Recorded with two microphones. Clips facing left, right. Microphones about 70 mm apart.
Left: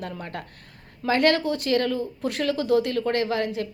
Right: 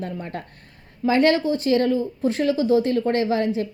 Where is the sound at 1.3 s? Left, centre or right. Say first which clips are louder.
Right 3 dB; left.